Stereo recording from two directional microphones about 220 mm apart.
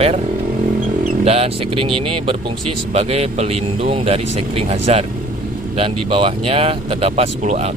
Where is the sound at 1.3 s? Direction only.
25° right (ahead or behind).